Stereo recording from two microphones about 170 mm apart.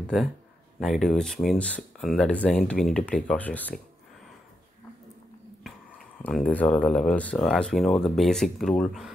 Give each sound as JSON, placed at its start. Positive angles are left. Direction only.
{"t": 0.1, "sound": "speech", "side_deg": 0}
{"t": 6.2, "sound": "speech", "side_deg": 10}